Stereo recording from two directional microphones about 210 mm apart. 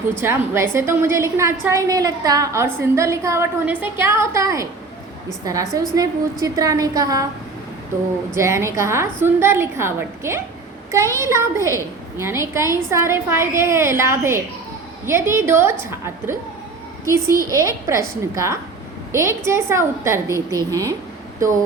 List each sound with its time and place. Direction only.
0.2 s a woman's voice: 10° right (ahead or behind)
8.4 s a woman's voice: 15° right (ahead or behind)